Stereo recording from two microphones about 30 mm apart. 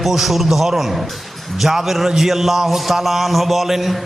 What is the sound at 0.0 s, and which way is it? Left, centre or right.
A man's voice, centre.